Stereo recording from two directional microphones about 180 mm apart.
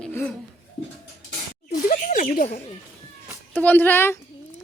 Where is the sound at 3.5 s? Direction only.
10° left (ahead or behind).